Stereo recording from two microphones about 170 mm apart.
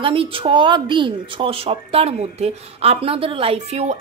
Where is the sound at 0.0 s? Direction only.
30° right (ahead or behind).